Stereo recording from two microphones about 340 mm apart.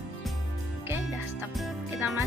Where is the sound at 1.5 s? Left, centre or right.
Centre.